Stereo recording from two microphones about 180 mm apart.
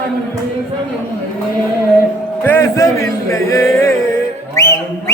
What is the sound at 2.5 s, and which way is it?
Speech, 15° left (ahead or behind).